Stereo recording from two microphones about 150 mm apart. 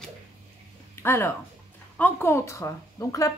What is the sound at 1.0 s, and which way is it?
A woman's voice, 15° left (ahead or behind).